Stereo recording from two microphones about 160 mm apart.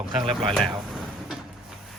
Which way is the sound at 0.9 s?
Centre (ahead or behind).